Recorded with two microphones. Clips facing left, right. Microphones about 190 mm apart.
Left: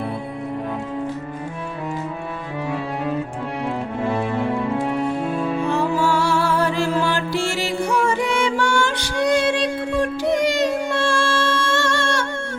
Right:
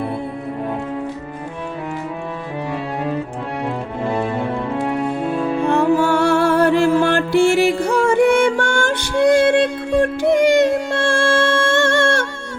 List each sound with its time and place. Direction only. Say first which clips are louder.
5.6 s music: right 7 dB; 55° right (ahead or behind)